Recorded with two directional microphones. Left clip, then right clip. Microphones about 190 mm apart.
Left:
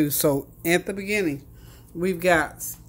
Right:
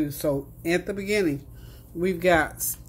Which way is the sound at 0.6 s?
25° left (ahead or behind).